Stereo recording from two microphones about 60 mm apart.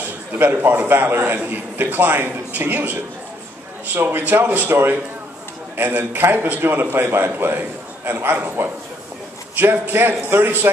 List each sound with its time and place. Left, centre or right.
0.4 s a man's voice: right